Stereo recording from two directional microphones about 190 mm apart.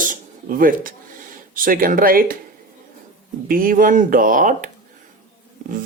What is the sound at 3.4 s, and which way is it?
Speech, 50° right (ahead or behind).